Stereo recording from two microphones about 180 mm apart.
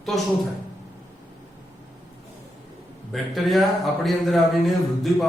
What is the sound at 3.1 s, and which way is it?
A man's voice, centre (ahead or behind).